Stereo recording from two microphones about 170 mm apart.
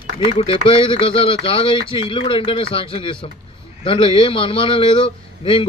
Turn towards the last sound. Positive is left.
turn(degrees=30)  # may be behind; listen again after turning